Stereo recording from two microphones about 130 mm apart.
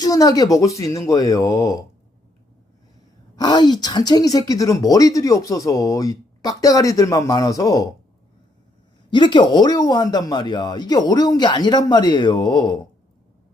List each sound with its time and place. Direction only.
0.0 s speech: 30° left (ahead or behind)
3.3 s speech: 35° left (ahead or behind)
9.0 s speech: 35° left (ahead or behind)